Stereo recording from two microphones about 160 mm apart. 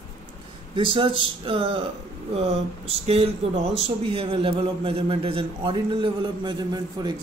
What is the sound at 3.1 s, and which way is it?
A man's voice, 40° right (ahead or behind).